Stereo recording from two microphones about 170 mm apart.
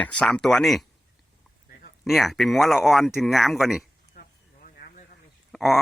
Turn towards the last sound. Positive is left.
turn(degrees=0)  # may be behind; listen again after turning